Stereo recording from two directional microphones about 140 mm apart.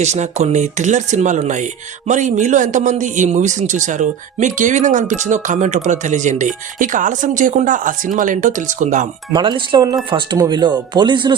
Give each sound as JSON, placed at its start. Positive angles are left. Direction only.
{"t": 0.0, "sound": "speech", "side_deg": -55}
{"t": 9.3, "sound": "speech", "side_deg": -35}